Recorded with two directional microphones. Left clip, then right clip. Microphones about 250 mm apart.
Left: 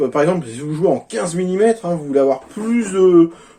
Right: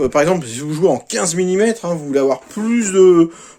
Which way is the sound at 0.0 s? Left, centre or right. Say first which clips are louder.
Right 2 dB; right.